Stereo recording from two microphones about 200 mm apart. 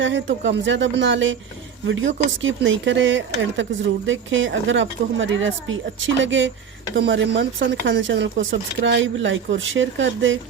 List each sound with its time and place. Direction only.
0.0 s speech: 65° right (ahead or behind)